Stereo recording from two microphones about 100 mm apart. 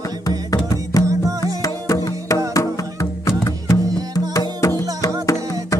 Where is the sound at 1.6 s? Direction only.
35° left (ahead or behind).